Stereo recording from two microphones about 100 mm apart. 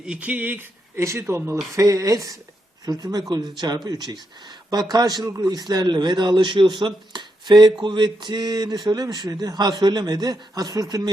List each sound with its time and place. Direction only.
0.0 s a man's voice: 10° right (ahead or behind); by 11.1 s 40° right (ahead or behind)